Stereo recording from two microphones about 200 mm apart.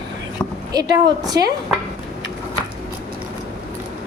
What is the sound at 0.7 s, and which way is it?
Speech, 20° right (ahead or behind).